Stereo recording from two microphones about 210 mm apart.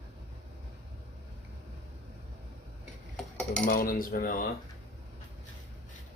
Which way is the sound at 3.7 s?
40° left (ahead or behind).